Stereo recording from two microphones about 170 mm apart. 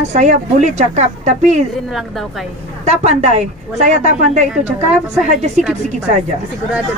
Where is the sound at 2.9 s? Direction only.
40° right (ahead or behind).